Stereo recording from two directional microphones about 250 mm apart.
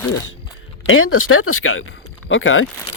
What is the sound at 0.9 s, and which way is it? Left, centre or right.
Speech, left.